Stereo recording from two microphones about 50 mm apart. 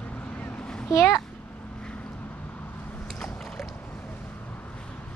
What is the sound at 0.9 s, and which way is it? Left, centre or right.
Speech, left.